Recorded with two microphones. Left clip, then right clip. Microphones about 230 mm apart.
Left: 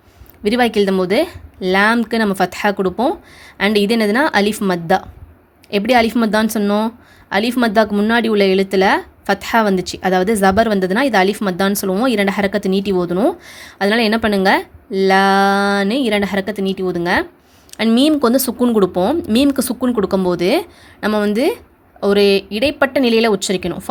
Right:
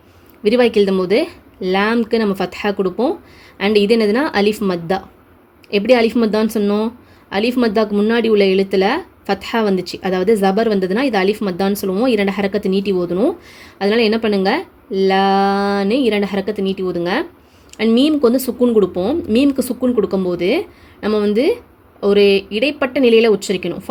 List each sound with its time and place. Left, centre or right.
0.4 s a woman's voice: centre